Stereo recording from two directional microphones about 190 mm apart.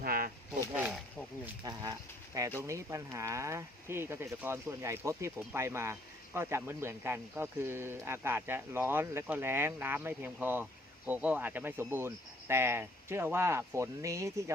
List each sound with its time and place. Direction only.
0.0 s a sound: 50° right (ahead or behind)
0.8 s wild animals: 5° right (ahead or behind)
1.6 s speech: 20° right (ahead or behind)